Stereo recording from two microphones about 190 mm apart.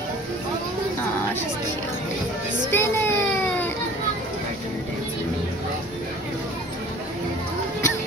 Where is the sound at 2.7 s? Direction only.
10° left (ahead or behind).